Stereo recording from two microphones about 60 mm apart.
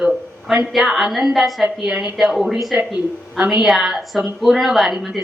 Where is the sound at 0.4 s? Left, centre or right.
Centre.